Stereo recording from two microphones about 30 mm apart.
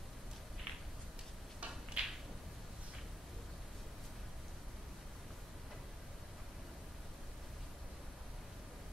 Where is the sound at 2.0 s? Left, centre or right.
Right.